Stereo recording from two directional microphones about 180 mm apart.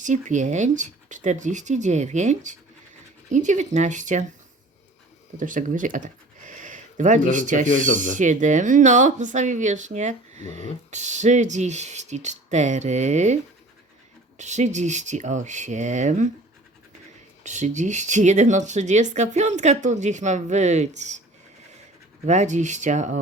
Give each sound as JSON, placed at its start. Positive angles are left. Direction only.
{"t": 0.0, "sound": "speech", "side_deg": -45}
{"t": 5.4, "sound": "speech", "side_deg": -45}
{"t": 17.4, "sound": "speech", "side_deg": -40}
{"t": 22.3, "sound": "speech", "side_deg": -40}